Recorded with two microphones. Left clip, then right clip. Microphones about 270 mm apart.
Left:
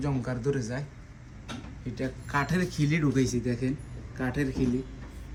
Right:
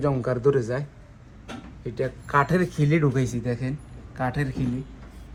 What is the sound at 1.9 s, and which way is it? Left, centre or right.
Speech, centre.